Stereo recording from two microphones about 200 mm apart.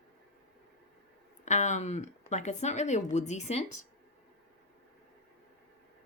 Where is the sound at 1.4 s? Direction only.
35° left (ahead or behind).